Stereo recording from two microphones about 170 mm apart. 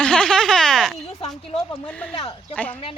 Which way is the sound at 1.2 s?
35° left (ahead or behind).